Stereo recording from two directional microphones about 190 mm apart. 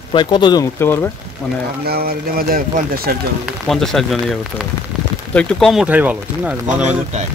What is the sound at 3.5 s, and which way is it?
Speech, centre (ahead or behind).